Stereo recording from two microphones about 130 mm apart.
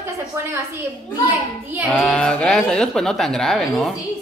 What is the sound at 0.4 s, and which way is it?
Speech, 20° right (ahead or behind).